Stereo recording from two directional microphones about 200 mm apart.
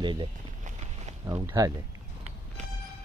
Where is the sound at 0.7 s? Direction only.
35° right (ahead or behind).